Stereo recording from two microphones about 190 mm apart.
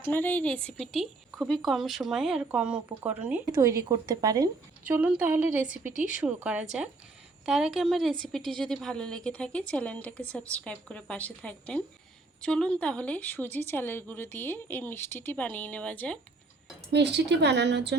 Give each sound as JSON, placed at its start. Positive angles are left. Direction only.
{"t": 0.0, "sound": "a woman's voice", "side_deg": 10}
{"t": 4.8, "sound": "a woman's voice", "side_deg": -5}
{"t": 16.9, "sound": "speech", "side_deg": -65}